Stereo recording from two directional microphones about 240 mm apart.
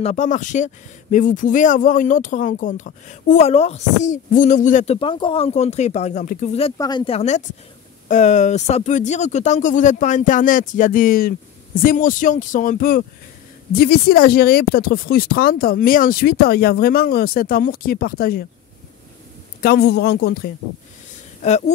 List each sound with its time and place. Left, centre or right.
0.0 s speech: left
6.8 s speech: centre; by 18.4 s left
19.6 s speech: left
21.4 s speech: left